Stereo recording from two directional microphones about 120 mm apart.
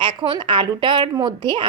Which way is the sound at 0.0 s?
40° right (ahead or behind).